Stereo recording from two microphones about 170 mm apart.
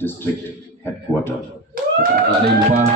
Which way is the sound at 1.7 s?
60° right (ahead or behind).